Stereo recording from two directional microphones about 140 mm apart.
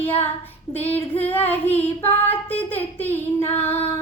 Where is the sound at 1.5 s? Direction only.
15° left (ahead or behind).